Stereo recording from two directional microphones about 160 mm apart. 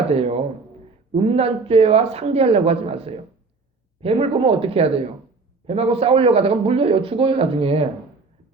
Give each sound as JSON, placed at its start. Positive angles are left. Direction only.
{"t": 0.1, "sound": "a man's voice", "side_deg": -40}